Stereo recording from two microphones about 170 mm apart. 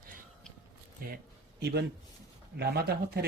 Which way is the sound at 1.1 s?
75° right (ahead or behind).